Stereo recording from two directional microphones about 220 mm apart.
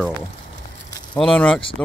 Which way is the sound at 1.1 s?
5° left (ahead or behind).